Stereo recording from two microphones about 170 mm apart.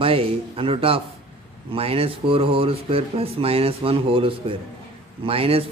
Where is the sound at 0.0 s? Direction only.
35° right (ahead or behind).